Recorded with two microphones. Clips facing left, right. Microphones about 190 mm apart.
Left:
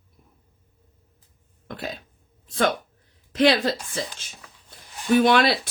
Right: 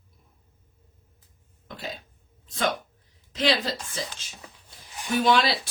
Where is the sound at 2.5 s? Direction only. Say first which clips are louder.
Left 4 dB; 60° left (ahead or behind).